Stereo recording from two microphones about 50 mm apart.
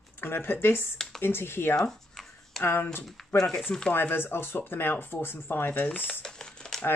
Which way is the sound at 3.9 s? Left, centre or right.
Left.